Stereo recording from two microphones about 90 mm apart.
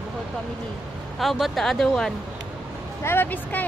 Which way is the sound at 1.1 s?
Centre (ahead or behind).